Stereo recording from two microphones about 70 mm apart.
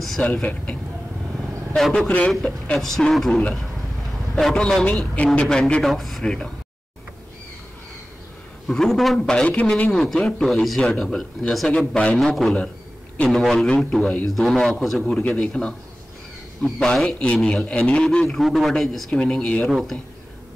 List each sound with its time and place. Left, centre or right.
0.2 s speech: left
1.8 s a man's voice: centre
2.4 s a man's voice: centre
2.8 s a man's voice: centre
5.1 s a man's voice: centre
8.6 s a man's voice: centre
12.2 s a man's voice: centre
18.2 s a man's voice: centre
19.7 s a man's voice: centre